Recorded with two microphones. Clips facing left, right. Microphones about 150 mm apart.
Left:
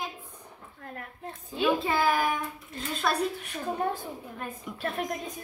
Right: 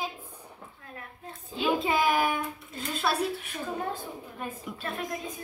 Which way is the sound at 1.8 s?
15° right (ahead or behind).